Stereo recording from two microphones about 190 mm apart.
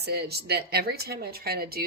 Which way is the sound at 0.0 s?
55° right (ahead or behind).